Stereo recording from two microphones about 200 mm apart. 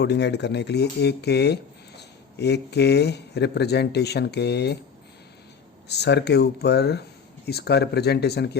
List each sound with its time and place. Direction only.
0.0 s speech: 60° left (ahead or behind)
5.9 s speech: 55° left (ahead or behind)